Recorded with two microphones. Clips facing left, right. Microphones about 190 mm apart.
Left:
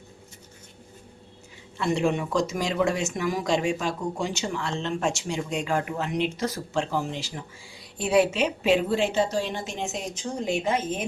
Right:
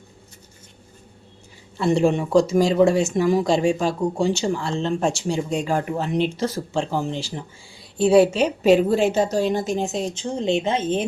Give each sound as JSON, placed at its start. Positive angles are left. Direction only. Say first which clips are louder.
{"t": 1.8, "sound": "speech", "louder": "right 6 dB", "side_deg": -30}